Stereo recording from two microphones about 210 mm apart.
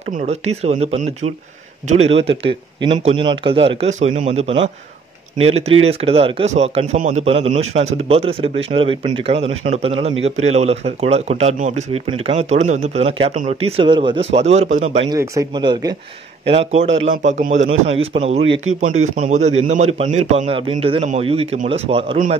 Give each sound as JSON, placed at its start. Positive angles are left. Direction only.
{"t": 0.1, "sound": "speech", "side_deg": -35}
{"t": 15.0, "sound": "speech", "side_deg": -15}
{"t": 16.7, "sound": "a man's voice", "side_deg": -65}
{"t": 17.0, "sound": "speech", "side_deg": -35}